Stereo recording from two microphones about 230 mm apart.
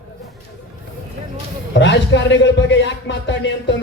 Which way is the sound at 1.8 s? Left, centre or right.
Left.